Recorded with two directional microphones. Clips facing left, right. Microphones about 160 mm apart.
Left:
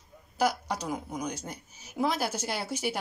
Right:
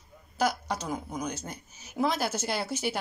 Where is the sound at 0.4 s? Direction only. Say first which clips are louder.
Even; 10° left (ahead or behind).